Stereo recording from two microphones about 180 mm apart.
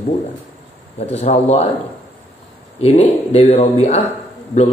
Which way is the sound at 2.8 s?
35° left (ahead or behind).